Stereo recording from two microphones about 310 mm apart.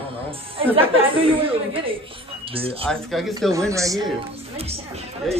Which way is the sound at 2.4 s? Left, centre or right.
Centre.